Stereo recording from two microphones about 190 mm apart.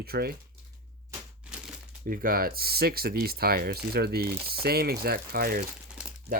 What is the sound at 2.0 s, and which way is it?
Speech, 50° right (ahead or behind).